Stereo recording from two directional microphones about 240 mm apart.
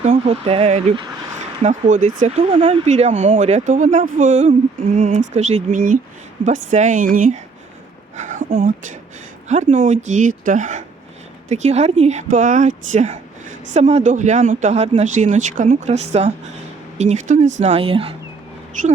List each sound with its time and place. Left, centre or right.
0.0 s speech: right
8.1 s a sound: right
9.5 s speech: right